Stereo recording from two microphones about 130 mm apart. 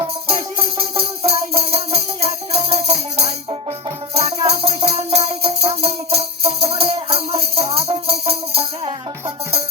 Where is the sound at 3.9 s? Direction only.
40° right (ahead or behind).